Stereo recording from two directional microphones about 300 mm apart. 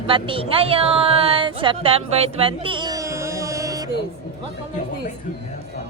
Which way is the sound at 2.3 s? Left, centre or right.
Centre.